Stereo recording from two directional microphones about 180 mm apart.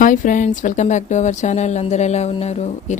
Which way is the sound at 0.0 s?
45° left (ahead or behind).